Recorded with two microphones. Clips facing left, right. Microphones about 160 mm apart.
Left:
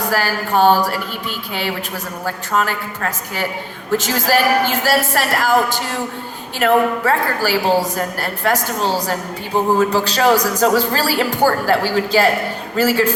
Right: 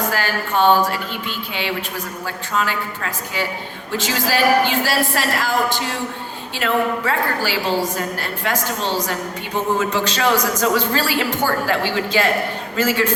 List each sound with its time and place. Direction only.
0.1 s a man's voice: 40° left (ahead or behind)
2.2 s a man's voice: 45° left (ahead or behind)